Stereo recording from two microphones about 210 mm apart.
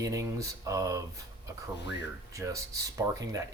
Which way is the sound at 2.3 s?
15° right (ahead or behind).